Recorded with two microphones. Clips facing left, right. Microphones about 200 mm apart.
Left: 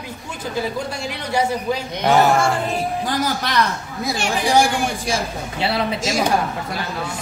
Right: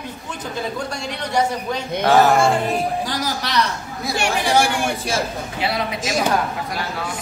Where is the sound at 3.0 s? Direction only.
50° left (ahead or behind).